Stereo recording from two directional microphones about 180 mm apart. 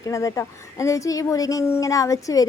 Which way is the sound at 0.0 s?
20° left (ahead or behind).